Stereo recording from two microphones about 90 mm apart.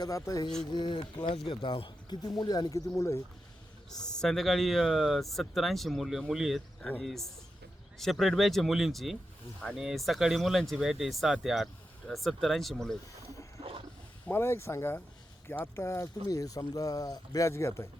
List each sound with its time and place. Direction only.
0.0 s speech: 40° left (ahead or behind)
0.7 s speech: 60° left (ahead or behind)
2.4 s speech: 45° left (ahead or behind)
4.0 s speech: 5° left (ahead or behind)
13.6 s a sound: 90° right
14.3 s speech: 25° left (ahead or behind)